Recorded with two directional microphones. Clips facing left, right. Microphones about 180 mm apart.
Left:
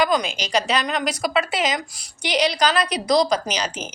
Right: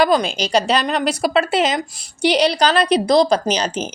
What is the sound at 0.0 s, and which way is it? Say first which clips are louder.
A woman's voice: right 5 dB; 35° right (ahead or behind).